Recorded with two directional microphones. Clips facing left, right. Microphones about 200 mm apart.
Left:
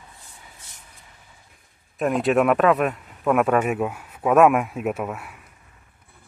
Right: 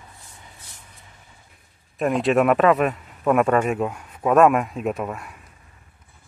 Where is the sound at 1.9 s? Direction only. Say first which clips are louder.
Right 1 dB; centre (ahead or behind).